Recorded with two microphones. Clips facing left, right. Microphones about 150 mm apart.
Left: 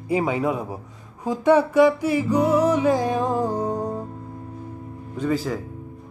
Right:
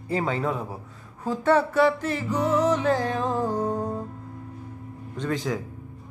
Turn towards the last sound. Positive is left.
turn(degrees=5)  # may be behind; listen again after turning